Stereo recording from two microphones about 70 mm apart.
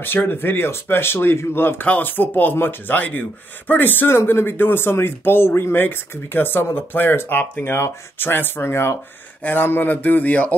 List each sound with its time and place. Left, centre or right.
0.0 s speech: left